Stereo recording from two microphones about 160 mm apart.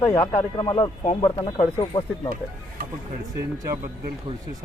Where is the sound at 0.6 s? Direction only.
25° left (ahead or behind).